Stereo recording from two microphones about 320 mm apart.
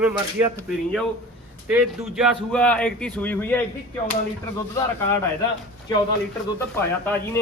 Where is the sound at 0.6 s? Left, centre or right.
Centre.